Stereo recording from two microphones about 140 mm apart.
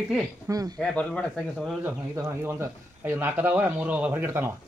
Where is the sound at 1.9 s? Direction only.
15° right (ahead or behind).